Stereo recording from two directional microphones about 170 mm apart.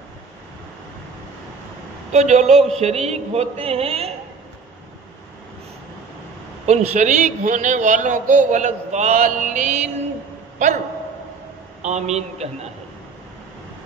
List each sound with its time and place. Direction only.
2.1 s a man's voice: 45° right (ahead or behind)
2.5 s a sound: centre (ahead or behind)
2.8 s a woman's voice: 40° right (ahead or behind)
6.6 s a man's voice: 40° right (ahead or behind)
11.8 s a woman's voice: 40° right (ahead or behind)